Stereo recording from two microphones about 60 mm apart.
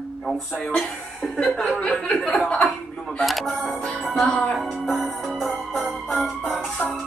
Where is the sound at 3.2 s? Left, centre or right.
Centre.